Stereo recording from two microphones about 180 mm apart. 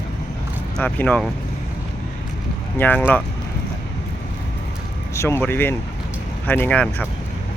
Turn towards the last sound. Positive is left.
turn(degrees=5)  # may be behind; listen again after turning